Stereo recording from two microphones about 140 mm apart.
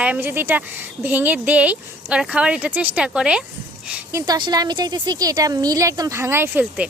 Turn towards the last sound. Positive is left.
turn(degrees=-15)  # may be behind; listen again after turning